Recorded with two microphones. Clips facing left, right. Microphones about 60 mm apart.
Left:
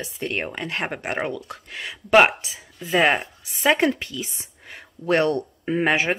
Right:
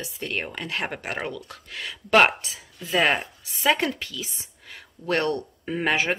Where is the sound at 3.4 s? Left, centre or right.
Left.